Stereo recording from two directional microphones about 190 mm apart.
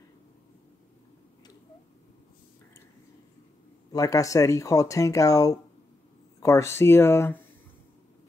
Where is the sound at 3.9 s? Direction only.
20° left (ahead or behind).